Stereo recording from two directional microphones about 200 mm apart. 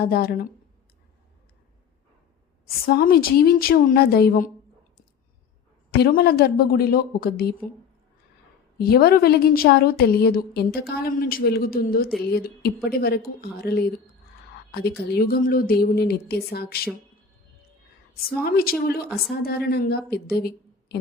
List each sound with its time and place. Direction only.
0.0 s a woman's voice: 50° left (ahead or behind)
2.8 s a woman's voice: 50° left (ahead or behind)
5.9 s a woman's voice: 50° left (ahead or behind)
8.8 s a woman's voice: 50° left (ahead or behind)
18.4 s a woman's voice: 50° left (ahead or behind)